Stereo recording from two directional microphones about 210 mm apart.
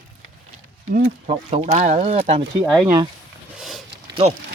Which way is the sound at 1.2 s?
30° right (ahead or behind).